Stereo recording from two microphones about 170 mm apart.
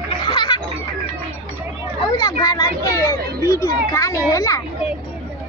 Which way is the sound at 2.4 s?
20° left (ahead or behind).